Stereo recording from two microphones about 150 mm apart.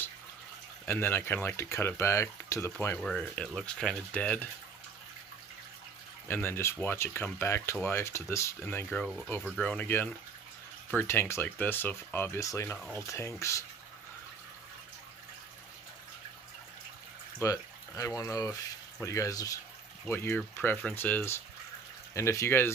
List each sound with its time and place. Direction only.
0.9 s speech: 15° left (ahead or behind)
3.0 s speech: 5° left (ahead or behind)
6.2 s speech: 15° left (ahead or behind)
9.0 s speech: centre (ahead or behind); by 12.8 s 15° left (ahead or behind)
12.8 s speech: centre (ahead or behind)
13.1 s speech: 20° left (ahead or behind)
17.4 s speech: 20° left (ahead or behind)